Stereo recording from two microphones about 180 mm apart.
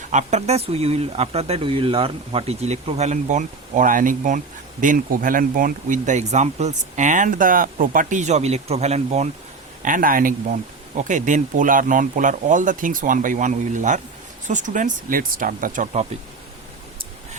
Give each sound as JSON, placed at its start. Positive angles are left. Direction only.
{"t": 0.1, "sound": "speech", "side_deg": -40}
{"t": 9.8, "sound": "speech", "side_deg": -50}